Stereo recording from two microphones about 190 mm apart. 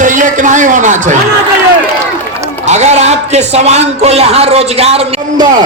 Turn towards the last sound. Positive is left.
turn(degrees=-30)  # may be behind; listen again after turning